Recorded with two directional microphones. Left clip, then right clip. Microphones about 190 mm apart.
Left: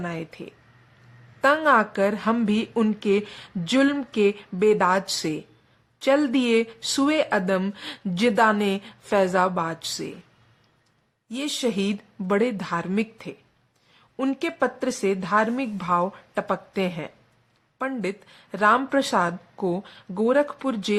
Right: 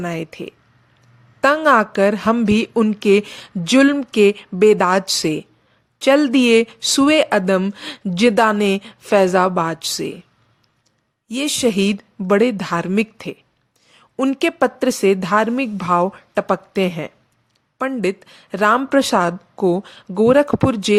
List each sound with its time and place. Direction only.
0.0 s a woman's voice: 35° right (ahead or behind)
11.3 s a woman's voice: 35° right (ahead or behind)